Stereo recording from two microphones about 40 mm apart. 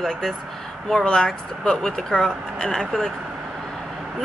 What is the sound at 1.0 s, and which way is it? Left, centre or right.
A woman's voice, left.